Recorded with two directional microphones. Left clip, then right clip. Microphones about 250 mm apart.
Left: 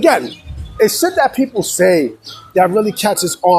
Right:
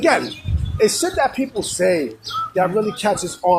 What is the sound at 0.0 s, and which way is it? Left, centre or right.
Speech, left.